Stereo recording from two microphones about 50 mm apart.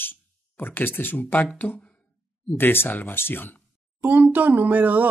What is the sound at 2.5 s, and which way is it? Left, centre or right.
Speech, left.